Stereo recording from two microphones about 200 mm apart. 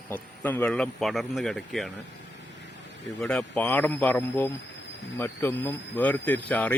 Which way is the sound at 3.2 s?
5° left (ahead or behind).